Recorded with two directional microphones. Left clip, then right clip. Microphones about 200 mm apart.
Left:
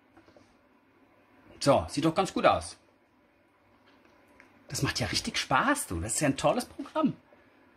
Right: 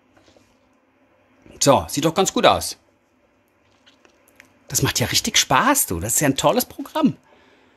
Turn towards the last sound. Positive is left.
turn(degrees=-50)  # may be behind; listen again after turning